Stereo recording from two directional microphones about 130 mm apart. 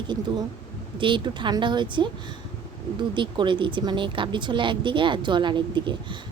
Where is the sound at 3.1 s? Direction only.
40° right (ahead or behind).